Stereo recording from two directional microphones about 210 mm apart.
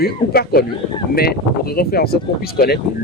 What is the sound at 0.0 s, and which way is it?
A man's voice, 45° left (ahead or behind).